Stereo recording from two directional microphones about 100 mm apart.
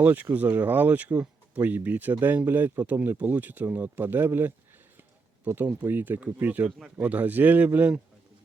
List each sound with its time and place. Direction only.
0.0 s speech: 20° right (ahead or behind)
6.7 s speech: 5° right (ahead or behind)
7.0 s speech: 15° right (ahead or behind)